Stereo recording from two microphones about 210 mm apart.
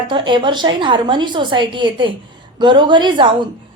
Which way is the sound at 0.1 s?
20° right (ahead or behind).